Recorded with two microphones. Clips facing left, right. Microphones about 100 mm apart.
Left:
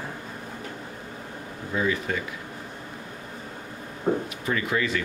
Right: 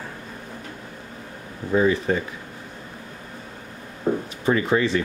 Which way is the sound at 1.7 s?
35° right (ahead or behind).